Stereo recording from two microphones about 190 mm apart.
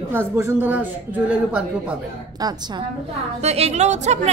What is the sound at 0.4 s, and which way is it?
Speech, 10° right (ahead or behind).